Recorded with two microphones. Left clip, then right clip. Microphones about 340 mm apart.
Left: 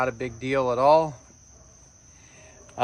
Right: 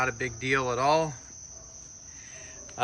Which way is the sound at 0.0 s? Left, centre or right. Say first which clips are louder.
Left 2 dB; centre.